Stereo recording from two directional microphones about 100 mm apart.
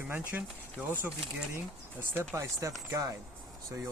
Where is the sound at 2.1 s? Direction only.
25° right (ahead or behind).